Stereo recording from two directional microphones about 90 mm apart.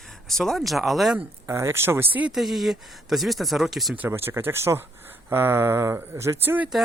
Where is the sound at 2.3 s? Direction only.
Centre (ahead or behind).